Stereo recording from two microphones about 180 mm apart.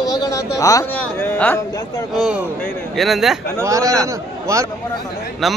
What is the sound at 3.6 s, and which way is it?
A man's voice, 20° right (ahead or behind).